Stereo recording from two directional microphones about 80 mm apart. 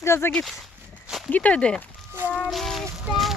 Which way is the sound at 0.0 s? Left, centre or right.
Left.